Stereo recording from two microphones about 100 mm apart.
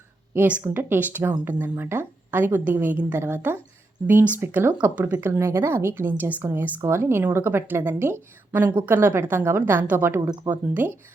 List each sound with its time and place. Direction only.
0.3 s speech: 15° right (ahead or behind)
10.2 s speech: 40° right (ahead or behind)
10.5 s speech: 15° right (ahead or behind)